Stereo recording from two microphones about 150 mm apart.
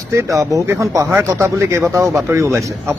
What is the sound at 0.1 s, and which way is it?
A man's voice, 20° right (ahead or behind).